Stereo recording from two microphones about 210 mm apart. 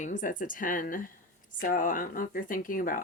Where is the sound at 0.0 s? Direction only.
35° left (ahead or behind).